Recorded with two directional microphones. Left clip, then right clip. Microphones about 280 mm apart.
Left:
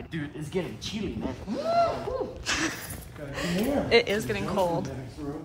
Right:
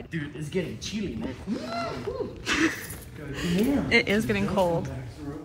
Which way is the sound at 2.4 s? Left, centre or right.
Centre.